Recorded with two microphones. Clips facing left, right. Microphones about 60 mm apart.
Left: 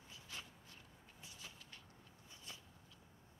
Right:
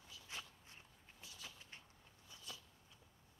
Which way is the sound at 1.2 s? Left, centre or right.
Left.